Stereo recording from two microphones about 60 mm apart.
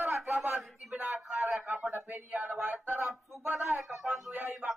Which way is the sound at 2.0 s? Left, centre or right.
Right.